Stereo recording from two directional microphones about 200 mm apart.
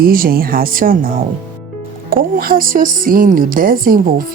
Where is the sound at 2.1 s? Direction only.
45° right (ahead or behind).